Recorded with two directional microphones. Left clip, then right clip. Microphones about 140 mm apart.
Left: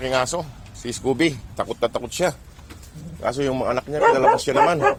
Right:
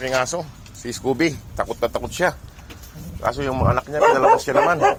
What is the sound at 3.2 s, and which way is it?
Speech, 50° left (ahead or behind).